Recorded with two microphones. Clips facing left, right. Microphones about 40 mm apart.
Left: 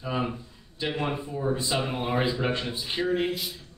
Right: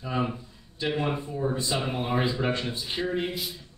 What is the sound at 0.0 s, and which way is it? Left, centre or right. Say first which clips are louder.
A man's voice: even; centre.